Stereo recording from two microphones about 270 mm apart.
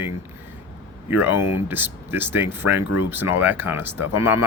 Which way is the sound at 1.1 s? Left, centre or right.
Centre.